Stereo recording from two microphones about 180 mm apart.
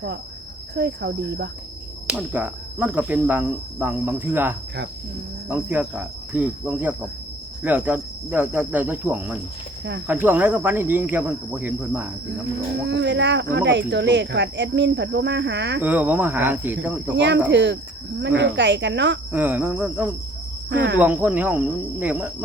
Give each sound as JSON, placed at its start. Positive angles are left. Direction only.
{"t": 0.8, "sound": "speech", "side_deg": -70}
{"t": 2.0, "sound": "speech", "side_deg": -10}
{"t": 12.9, "sound": "speech", "side_deg": -75}
{"t": 15.8, "sound": "speech", "side_deg": -10}
{"t": 17.2, "sound": "speech", "side_deg": -75}
{"t": 19.3, "sound": "speech", "side_deg": -10}
{"t": 20.7, "sound": "speech", "side_deg": -90}
{"t": 21.0, "sound": "speech", "side_deg": -10}